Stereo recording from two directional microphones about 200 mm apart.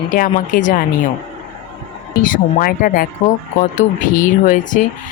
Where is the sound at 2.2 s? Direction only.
45° left (ahead or behind).